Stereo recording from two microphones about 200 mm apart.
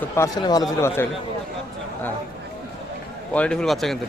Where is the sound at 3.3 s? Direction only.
5° left (ahead or behind).